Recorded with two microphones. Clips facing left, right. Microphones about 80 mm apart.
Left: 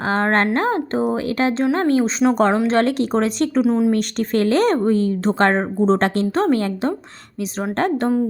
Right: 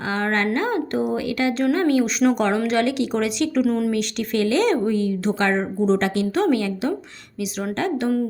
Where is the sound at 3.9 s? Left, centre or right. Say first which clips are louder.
Left 4 dB; left.